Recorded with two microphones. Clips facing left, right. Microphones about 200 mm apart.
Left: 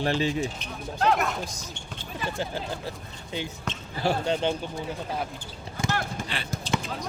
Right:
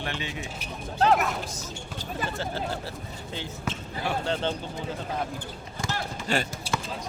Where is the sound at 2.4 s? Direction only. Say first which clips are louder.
Even; 15° left (ahead or behind).